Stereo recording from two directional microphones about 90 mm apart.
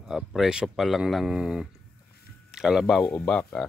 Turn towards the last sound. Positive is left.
turn(degrees=15)  # may be behind; listen again after turning